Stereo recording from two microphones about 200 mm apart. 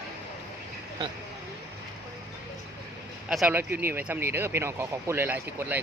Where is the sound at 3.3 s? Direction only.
5° right (ahead or behind).